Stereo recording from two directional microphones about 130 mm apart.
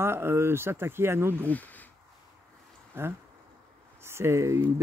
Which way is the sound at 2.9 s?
15° right (ahead or behind).